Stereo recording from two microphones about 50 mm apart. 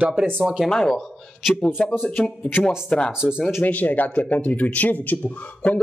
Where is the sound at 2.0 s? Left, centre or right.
Left.